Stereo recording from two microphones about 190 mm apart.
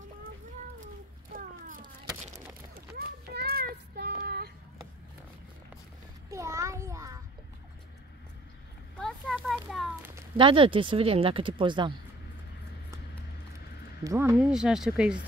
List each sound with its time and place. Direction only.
3.3 s child singing: 55° right (ahead or behind)
6.3 s a sound: 15° right (ahead or behind)
8.9 s a sound: 5° left (ahead or behind)
10.3 s speech: 25° right (ahead or behind)
14.0 s speech: 15° right (ahead or behind)
14.3 s speech: 5° right (ahead or behind)